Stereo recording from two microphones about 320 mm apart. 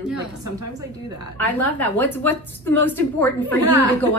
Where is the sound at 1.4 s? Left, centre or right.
Centre.